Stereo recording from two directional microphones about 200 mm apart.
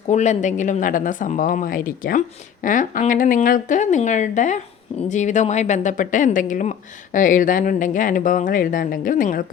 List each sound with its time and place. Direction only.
0.1 s speech: 35° left (ahead or behind)